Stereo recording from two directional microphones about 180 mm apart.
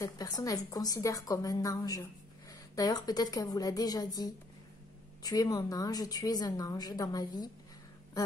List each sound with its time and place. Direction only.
0.0 s a woman's voice: 20° left (ahead or behind)